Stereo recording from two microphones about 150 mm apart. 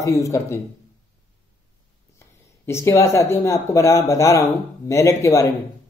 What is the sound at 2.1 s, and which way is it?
Speech, 20° left (ahead or behind).